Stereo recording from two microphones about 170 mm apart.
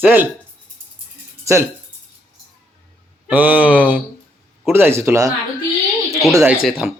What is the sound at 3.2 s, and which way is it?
Speech, 10° right (ahead or behind).